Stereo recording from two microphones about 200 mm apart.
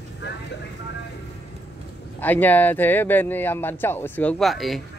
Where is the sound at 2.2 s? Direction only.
10° left (ahead or behind).